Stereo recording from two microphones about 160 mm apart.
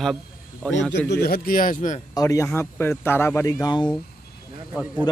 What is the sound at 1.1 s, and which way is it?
Speech, 70° left (ahead or behind).